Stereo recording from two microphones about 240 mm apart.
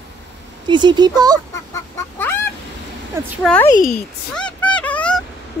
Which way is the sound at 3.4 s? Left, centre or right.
Centre.